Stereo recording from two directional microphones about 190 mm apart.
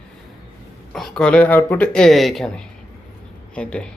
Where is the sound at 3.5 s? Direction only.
5° left (ahead or behind).